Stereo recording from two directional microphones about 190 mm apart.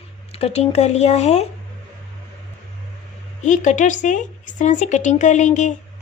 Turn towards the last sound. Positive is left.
turn(degrees=40)  # may be behind; listen again after turning